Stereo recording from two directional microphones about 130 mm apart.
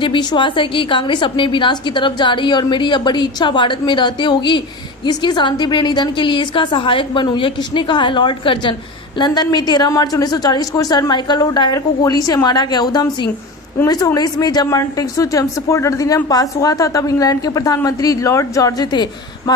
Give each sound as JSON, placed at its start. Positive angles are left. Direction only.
{"t": 0.0, "sound": "a woman's voice", "side_deg": 35}